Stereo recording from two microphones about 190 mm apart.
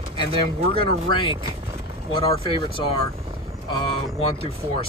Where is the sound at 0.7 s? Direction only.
25° left (ahead or behind).